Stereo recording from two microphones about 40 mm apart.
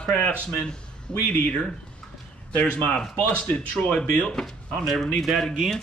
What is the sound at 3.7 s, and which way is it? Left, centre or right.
Speech, left.